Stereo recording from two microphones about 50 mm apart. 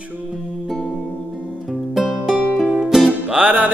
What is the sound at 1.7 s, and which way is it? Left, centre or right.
Music, centre.